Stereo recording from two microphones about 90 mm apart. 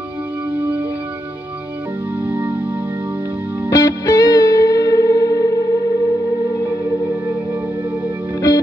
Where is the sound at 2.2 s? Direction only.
20° right (ahead or behind).